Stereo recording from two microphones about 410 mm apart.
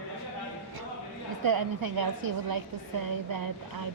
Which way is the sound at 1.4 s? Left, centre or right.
Right.